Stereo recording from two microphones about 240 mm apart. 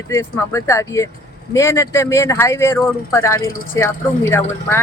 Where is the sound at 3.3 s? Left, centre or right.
Left.